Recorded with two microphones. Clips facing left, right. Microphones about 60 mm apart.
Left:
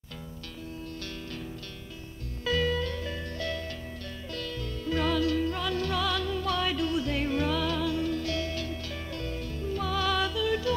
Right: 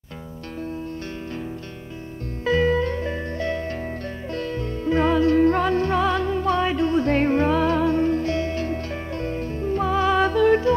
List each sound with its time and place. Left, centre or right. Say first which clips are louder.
2.4 s music: right 8 dB; right